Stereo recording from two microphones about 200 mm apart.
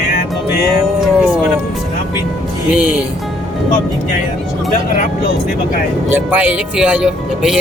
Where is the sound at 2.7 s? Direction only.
5° right (ahead or behind).